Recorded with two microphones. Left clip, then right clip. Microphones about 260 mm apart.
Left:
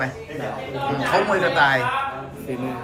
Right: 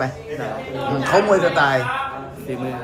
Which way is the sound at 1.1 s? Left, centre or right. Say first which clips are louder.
Right 3 dB; centre.